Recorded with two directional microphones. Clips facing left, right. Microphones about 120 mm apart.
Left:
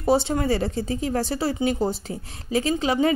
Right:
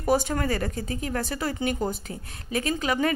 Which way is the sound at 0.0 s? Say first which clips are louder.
Left 3 dB; 25° left (ahead or behind).